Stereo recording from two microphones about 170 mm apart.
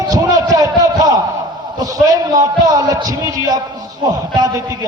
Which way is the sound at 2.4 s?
20° right (ahead or behind).